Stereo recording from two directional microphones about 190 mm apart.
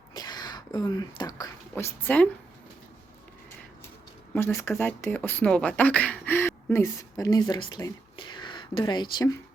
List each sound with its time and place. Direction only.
0.1 s whispering: 20° left (ahead or behind)
1.7 s speech: 10° left (ahead or behind)
4.4 s speech: 10° left (ahead or behind)